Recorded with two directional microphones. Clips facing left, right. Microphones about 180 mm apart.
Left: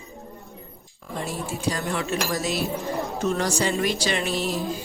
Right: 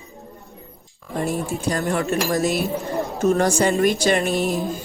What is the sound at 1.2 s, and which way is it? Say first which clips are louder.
Speech: right 6 dB; 50° right (ahead or behind).